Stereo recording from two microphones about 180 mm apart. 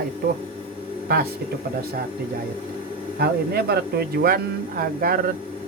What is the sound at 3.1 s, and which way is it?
Speech, 60° right (ahead or behind).